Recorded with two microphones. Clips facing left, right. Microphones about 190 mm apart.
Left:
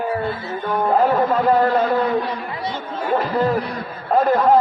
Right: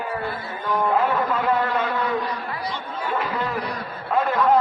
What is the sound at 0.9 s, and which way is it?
A man's voice, 40° left (ahead or behind).